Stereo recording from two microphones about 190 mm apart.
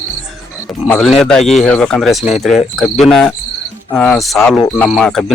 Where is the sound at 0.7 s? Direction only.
Centre (ahead or behind).